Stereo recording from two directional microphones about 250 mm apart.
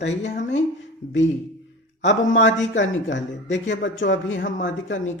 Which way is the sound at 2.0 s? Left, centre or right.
Left.